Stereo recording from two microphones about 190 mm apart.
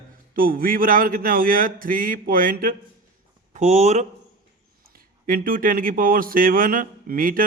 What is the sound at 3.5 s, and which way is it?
Speech, 35° right (ahead or behind).